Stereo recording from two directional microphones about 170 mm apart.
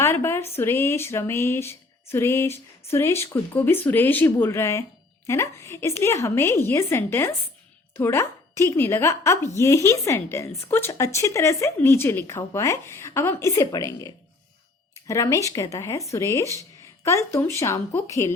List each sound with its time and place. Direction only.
0.0 s speech: 15° left (ahead or behind)